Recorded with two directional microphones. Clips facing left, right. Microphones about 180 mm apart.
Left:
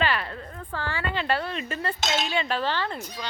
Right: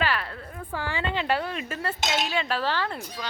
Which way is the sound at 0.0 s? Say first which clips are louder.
Left 1 dB; centre (ahead or behind).